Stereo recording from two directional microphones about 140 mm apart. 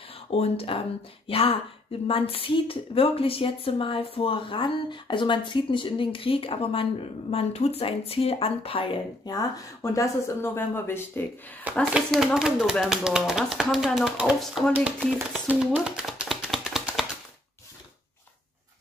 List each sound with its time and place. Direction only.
0.3 s speech: 45° left (ahead or behind)
9.2 s speech: 25° left (ahead or behind)
11.9 s speech: 5° right (ahead or behind)
15.4 s a sound: 5° right (ahead or behind)